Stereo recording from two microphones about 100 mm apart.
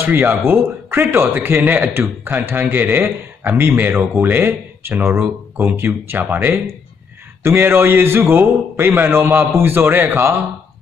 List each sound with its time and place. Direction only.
0.0 s speech: 20° right (ahead or behind)